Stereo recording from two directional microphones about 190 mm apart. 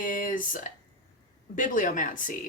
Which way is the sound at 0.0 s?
45° left (ahead or behind).